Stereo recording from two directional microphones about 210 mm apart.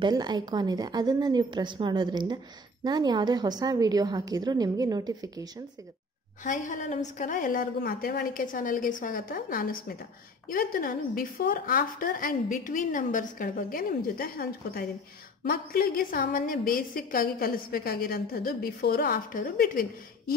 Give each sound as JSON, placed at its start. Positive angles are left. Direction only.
{"t": 0.0, "sound": "a woman's voice", "side_deg": -20}
{"t": 6.4, "sound": "a woman's voice", "side_deg": 35}